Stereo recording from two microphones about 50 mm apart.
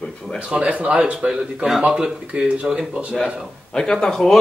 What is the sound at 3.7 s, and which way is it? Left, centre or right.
Speech, centre.